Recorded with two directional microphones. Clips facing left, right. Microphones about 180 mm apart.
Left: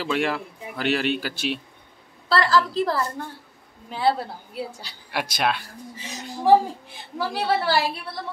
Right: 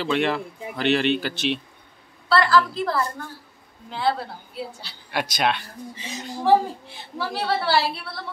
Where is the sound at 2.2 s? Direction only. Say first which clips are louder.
Right 1 dB; 40° left (ahead or behind).